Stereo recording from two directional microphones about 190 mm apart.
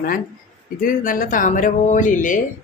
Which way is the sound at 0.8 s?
45° left (ahead or behind).